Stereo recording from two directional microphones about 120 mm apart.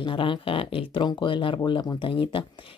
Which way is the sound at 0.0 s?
45° left (ahead or behind).